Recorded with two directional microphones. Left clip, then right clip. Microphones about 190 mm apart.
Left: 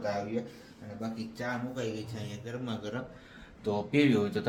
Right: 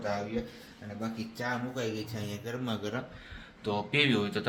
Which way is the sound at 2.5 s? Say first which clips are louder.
Right 2 dB; 35° right (ahead or behind).